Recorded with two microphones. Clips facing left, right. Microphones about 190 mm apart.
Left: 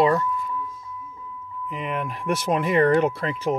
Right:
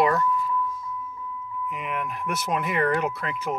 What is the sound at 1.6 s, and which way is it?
Speech, 30° left (ahead or behind).